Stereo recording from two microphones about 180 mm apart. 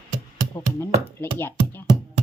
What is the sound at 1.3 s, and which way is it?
Music, 10° left (ahead or behind).